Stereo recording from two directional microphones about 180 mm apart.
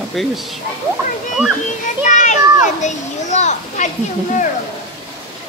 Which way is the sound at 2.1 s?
40° left (ahead or behind).